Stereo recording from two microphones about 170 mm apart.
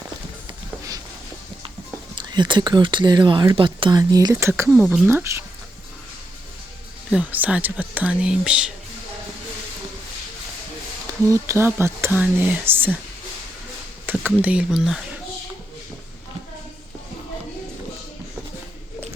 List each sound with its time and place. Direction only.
2.1 s speech: 30° right (ahead or behind)
7.1 s speech: 10° right (ahead or behind)
11.3 s speech: 15° right (ahead or behind)
14.1 s a sound: 10° right (ahead or behind)
14.4 s speech: 5° right (ahead or behind)